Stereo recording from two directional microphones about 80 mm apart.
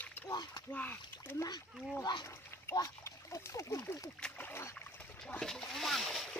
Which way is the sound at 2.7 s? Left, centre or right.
Left.